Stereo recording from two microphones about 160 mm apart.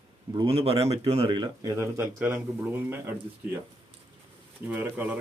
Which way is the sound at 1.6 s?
15° right (ahead or behind).